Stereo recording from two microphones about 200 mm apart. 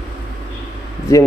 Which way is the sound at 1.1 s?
15° left (ahead or behind).